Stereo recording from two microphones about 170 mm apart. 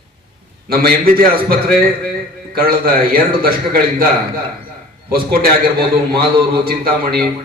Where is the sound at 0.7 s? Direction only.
60° right (ahead or behind).